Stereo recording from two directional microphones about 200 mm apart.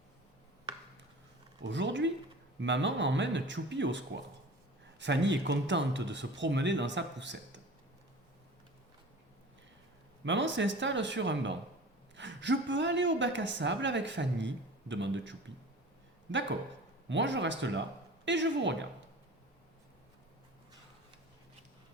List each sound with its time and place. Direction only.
1.6 s a woman's voice: 65° right (ahead or behind)
10.2 s a woman's voice: 65° right (ahead or behind)
17.1 s a woman's voice: 65° right (ahead or behind)